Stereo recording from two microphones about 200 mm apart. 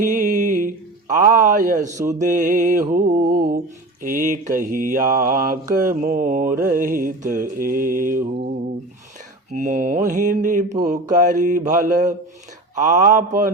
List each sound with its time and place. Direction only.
0.0 s speech: 40° right (ahead or behind)
3.2 s mantra: 45° right (ahead or behind)
9.6 s mantra: 40° right (ahead or behind)